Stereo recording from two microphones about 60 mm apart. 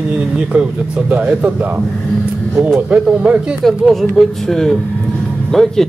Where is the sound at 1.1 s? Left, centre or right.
Right.